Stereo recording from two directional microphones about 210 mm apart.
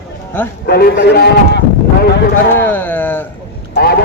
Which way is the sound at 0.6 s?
50° left (ahead or behind).